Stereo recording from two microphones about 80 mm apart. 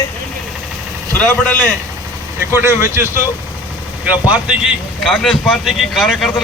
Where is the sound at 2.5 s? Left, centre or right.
Right.